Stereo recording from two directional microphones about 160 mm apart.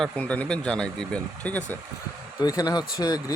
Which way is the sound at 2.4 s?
25° left (ahead or behind).